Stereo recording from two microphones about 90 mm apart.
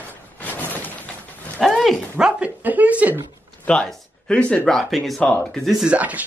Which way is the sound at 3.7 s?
10° left (ahead or behind).